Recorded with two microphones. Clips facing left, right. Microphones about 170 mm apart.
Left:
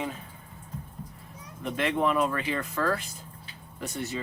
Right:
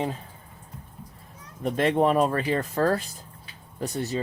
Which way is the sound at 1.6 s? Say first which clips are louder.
Right 5 dB; 35° right (ahead or behind).